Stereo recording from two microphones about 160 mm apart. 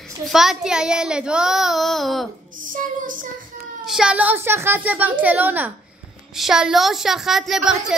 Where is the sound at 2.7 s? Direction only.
55° right (ahead or behind).